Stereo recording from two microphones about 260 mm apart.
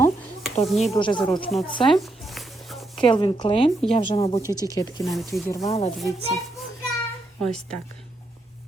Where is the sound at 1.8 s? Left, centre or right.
Centre.